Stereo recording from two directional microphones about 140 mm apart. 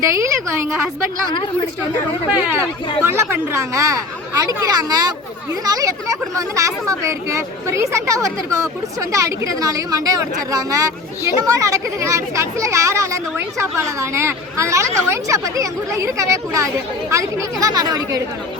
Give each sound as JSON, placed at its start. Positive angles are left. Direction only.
{"t": 0.0, "sound": "speech", "side_deg": -20}
{"t": 3.0, "sound": "speech", "side_deg": -15}